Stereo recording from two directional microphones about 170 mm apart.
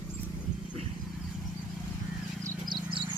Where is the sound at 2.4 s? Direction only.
25° right (ahead or behind).